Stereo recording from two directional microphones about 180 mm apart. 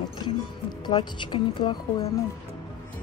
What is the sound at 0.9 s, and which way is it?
Speech, 25° left (ahead or behind).